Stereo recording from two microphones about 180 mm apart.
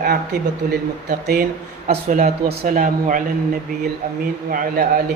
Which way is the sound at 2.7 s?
45° right (ahead or behind).